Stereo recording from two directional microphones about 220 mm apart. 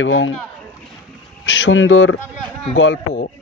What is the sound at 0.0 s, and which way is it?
Speech, 60° left (ahead or behind).